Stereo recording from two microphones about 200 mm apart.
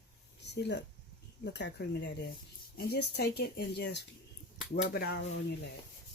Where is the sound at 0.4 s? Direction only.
60° left (ahead or behind).